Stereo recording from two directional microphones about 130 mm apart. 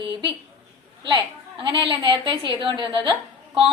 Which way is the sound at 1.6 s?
35° right (ahead or behind).